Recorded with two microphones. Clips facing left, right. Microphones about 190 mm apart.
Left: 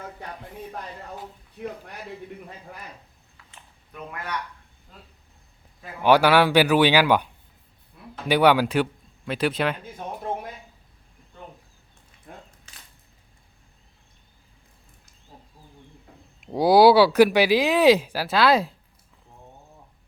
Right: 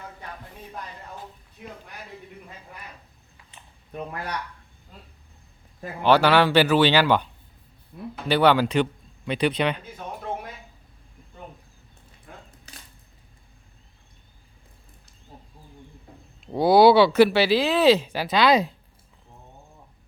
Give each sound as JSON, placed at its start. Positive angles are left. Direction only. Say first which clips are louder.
{"t": 3.9, "sound": "speech", "louder": "right 2 dB", "side_deg": -35}
{"t": 6.0, "sound": "speech", "louder": "left 1 dB", "side_deg": 10}
{"t": 7.9, "sound": "a sound", "louder": "right 11 dB", "side_deg": -45}
{"t": 8.3, "sound": "a man's voice", "louder": "left 1 dB", "side_deg": 10}
{"t": 12.3, "sound": "a sound", "louder": "left 2 dB", "side_deg": 35}
{"t": 16.5, "sound": "speech", "louder": "even", "side_deg": 10}